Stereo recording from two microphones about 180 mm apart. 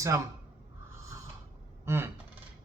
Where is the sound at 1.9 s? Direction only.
15° right (ahead or behind).